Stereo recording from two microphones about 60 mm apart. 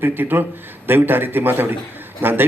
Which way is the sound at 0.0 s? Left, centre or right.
Right.